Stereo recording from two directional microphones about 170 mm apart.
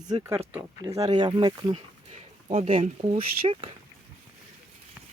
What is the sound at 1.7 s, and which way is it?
Speech, 40° right (ahead or behind).